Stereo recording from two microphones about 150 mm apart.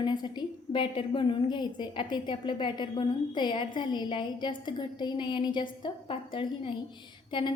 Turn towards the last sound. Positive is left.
turn(degrees=30)  # may be behind; listen again after turning